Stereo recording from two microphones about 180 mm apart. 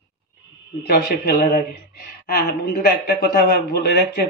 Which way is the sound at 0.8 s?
55° left (ahead or behind).